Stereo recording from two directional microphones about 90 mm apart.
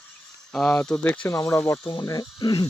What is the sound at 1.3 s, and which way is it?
Speech, 35° left (ahead or behind).